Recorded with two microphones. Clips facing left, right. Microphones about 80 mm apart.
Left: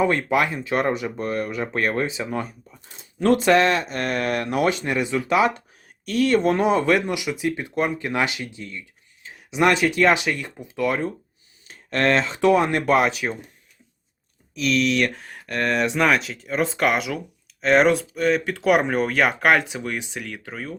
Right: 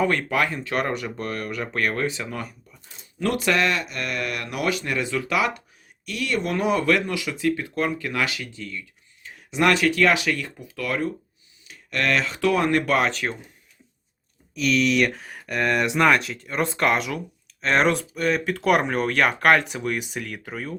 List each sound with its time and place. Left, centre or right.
0.0 s speech: centre
6.1 s speech: left
11.7 s speech: left
12.9 s speech: centre
14.5 s speech: centre